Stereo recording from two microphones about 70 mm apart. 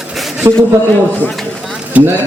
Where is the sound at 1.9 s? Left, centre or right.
Right.